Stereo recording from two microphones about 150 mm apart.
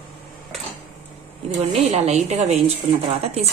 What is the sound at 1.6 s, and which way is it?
Speech, 50° right (ahead or behind).